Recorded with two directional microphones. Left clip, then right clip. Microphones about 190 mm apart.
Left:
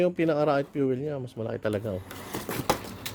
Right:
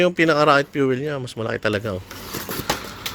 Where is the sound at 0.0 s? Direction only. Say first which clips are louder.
Right 8 dB; 5° right (ahead or behind).